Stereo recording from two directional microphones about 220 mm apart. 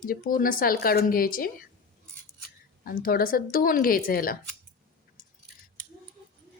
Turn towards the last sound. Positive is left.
turn(degrees=40)  # may be behind; listen again after turning